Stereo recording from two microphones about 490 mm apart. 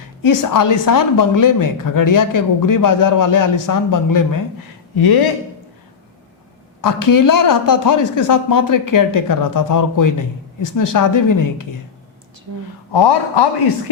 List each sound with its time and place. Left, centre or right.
0.2 s a woman's voice: left
6.8 s a woman's voice: left
12.9 s speech: left